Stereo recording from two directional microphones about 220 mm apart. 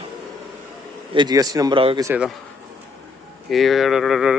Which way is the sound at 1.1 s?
20° right (ahead or behind).